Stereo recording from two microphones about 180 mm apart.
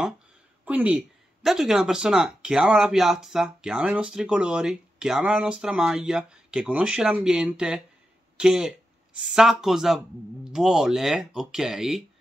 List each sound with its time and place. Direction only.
0.7 s speech: 10° right (ahead or behind)